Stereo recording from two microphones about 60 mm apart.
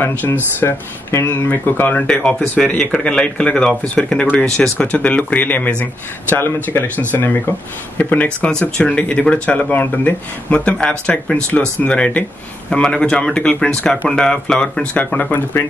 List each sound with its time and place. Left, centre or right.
0.1 s speech: left
1.2 s speech: left
2.0 s speech: centre
6.3 s speech: left
8.5 s speech: centre
9.7 s speech: left
10.5 s speech: centre